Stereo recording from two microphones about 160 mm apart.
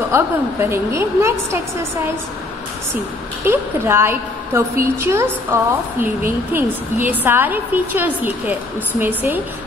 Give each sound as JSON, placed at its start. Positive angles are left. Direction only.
{"t": 0.1, "sound": "a woman's voice", "side_deg": -15}
{"t": 3.4, "sound": "a woman's voice", "side_deg": -15}